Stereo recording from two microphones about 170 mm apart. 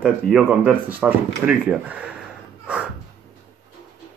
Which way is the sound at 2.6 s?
5° right (ahead or behind).